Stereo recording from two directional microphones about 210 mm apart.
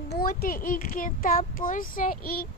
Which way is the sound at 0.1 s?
45° left (ahead or behind).